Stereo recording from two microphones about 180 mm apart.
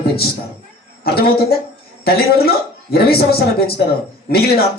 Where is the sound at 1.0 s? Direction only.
60° left (ahead or behind).